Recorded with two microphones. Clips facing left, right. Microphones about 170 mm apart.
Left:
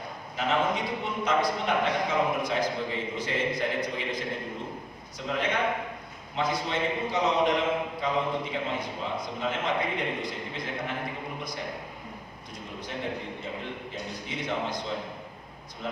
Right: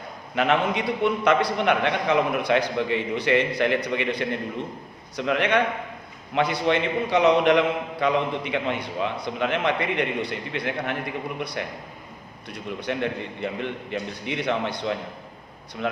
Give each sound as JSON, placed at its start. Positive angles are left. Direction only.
{"t": 0.3, "sound": "a man's voice", "side_deg": -70}
{"t": 12.5, "sound": "a man's voice", "side_deg": -70}